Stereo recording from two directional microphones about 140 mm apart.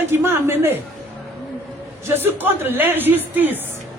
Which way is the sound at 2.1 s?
15° right (ahead or behind).